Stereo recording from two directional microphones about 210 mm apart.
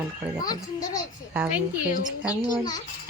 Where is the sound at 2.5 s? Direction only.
20° left (ahead or behind).